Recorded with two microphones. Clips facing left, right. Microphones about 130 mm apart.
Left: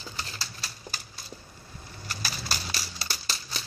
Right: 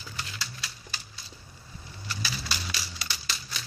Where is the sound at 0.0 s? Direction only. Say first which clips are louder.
Left 1 dB; 35° left (ahead or behind).